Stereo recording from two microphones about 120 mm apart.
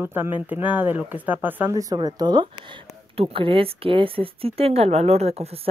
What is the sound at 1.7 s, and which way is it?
Speech, 30° right (ahead or behind).